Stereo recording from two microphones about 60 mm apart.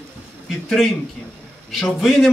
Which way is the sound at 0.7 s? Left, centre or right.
Centre.